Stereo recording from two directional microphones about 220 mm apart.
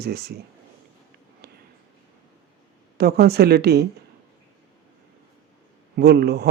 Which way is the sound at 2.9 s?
45° right (ahead or behind).